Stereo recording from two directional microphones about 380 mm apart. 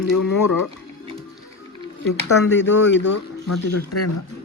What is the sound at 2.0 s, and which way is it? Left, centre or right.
Speech, left.